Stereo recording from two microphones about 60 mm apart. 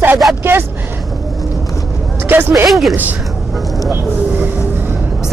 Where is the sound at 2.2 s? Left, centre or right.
Right.